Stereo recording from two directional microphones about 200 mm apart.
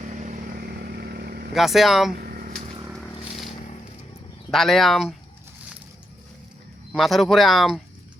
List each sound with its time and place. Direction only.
0.0 s vehicle: 40° right (ahead or behind)
1.5 s speech: centre (ahead or behind)
2.2 s a sound: 45° right (ahead or behind)
2.8 s a sound: centre (ahead or behind)
4.5 s speech: centre (ahead or behind)
6.9 s speech: centre (ahead or behind)